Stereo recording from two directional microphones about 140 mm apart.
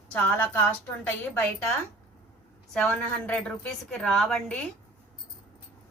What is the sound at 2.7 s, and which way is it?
A woman's voice, 5° left (ahead or behind).